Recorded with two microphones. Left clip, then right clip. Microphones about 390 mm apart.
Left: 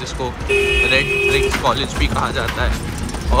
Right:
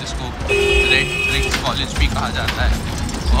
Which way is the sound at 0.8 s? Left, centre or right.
Centre.